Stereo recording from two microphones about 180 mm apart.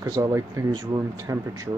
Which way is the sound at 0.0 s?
15° right (ahead or behind).